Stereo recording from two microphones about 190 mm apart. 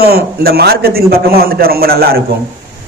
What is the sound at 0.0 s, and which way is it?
A man's voice, 55° right (ahead or behind).